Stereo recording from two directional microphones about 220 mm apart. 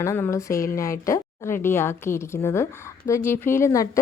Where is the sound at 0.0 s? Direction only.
15° left (ahead or behind).